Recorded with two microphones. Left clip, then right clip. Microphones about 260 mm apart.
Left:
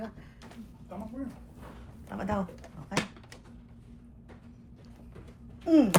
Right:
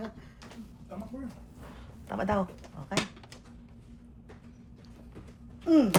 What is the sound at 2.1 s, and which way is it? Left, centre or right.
Speech, right.